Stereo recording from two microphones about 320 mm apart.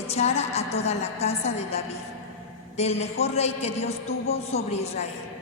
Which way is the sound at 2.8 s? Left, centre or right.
Centre.